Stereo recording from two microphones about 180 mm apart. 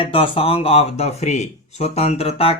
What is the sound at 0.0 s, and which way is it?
Speech, 30° left (ahead or behind).